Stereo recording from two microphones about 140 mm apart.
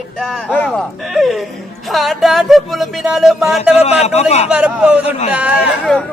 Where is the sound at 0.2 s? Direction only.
5° left (ahead or behind).